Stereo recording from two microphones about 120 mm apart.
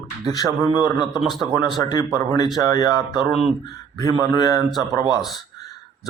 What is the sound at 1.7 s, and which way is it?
Speech, 35° left (ahead or behind).